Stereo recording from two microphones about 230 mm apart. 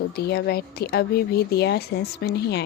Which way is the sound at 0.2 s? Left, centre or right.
Left.